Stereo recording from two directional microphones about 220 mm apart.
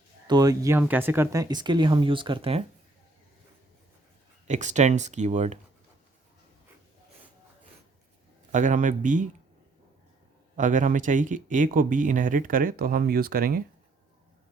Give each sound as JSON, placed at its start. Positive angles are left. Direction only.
{"t": 0.3, "sound": "speech", "side_deg": -15}
{"t": 4.4, "sound": "speech", "side_deg": -30}
{"t": 8.5, "sound": "speech", "side_deg": -35}
{"t": 10.6, "sound": "speech", "side_deg": -35}